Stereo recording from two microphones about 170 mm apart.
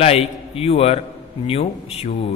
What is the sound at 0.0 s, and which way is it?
A man's voice, 40° left (ahead or behind).